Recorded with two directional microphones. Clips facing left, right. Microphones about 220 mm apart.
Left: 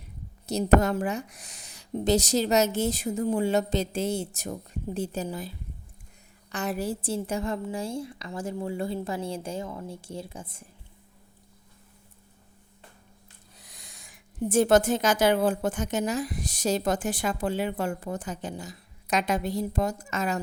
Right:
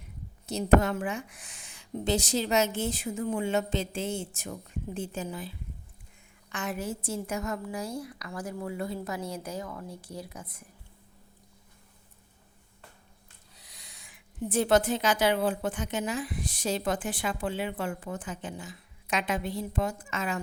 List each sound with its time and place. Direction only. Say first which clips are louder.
0.4 s a woman's voice: left 2 dB; 40° left (ahead or behind)
13.6 s speech: left 3 dB; 50° left (ahead or behind)